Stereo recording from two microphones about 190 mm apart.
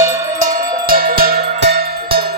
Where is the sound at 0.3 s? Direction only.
45° right (ahead or behind).